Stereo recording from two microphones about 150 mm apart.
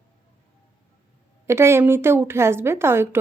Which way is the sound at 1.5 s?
15° right (ahead or behind).